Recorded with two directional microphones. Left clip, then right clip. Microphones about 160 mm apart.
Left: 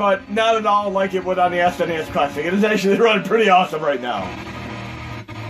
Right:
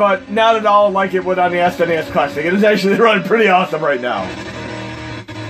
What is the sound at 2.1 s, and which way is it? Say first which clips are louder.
A man's voice: right 4 dB; 55° right (ahead or behind).